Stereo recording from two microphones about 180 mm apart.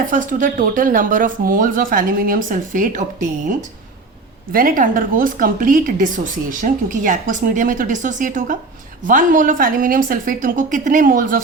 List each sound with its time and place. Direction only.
0.0 s speech: 45° right (ahead or behind)